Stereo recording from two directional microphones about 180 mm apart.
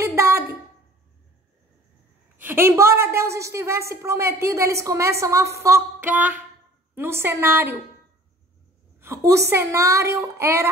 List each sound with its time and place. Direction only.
0.0 s a sound: 15° right (ahead or behind)
2.4 s a woman's voice: 15° right (ahead or behind)
9.0 s a woman's voice: 15° right (ahead or behind)